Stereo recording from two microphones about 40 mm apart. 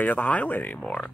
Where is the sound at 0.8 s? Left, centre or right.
Left.